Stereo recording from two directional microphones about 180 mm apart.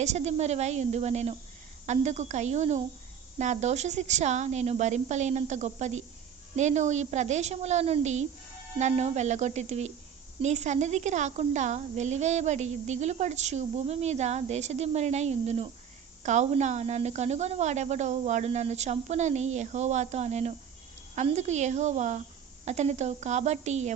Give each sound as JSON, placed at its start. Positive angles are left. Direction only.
{"t": 0.0, "sound": "a woman's voice", "side_deg": -40}